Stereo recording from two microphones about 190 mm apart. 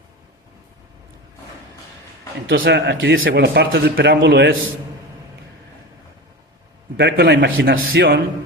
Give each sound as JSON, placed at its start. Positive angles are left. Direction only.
{"t": 2.5, "sound": "a man's voice", "side_deg": -65}
{"t": 6.9, "sound": "a man's voice", "side_deg": -60}